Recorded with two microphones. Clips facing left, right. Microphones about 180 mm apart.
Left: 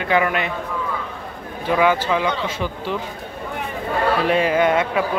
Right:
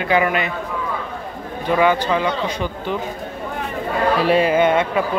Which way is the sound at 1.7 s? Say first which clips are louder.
Right 1 dB; 5° left (ahead or behind).